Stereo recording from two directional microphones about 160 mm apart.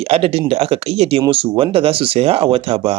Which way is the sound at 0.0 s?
40° right (ahead or behind).